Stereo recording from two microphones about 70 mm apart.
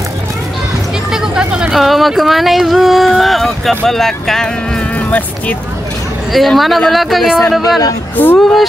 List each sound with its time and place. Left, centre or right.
1.1 s vehicle: centre
1.8 s speech: centre
4.9 s vehicle: left
6.3 s speech: centre
8.2 s speech: left